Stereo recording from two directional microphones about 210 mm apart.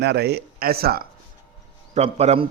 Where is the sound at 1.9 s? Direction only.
30° right (ahead or behind).